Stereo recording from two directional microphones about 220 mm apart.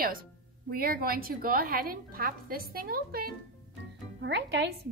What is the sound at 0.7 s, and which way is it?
Speech, 45° right (ahead or behind).